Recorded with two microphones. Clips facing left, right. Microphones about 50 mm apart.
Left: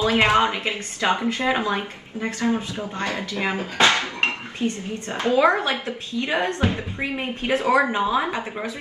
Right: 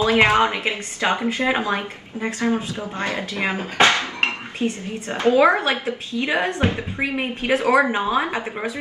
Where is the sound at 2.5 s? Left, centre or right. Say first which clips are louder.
Right 1 dB; right.